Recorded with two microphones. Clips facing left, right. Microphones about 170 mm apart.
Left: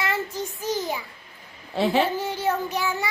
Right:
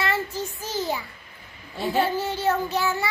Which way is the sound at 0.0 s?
15° left (ahead or behind).